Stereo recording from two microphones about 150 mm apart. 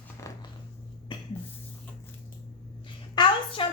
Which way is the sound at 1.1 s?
35° left (ahead or behind).